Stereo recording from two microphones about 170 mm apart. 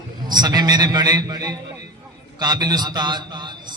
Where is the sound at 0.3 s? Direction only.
25° right (ahead or behind).